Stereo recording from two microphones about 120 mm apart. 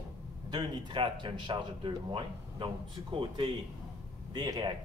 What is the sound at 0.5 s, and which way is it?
Speech, 40° right (ahead or behind).